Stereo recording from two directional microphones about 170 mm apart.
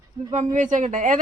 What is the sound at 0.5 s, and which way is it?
Speech, 45° right (ahead or behind).